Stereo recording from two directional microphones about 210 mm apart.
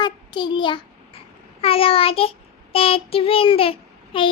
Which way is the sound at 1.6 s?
25° left (ahead or behind).